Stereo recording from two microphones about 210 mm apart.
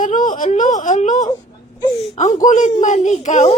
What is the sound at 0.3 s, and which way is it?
A child's voice, 35° left (ahead or behind).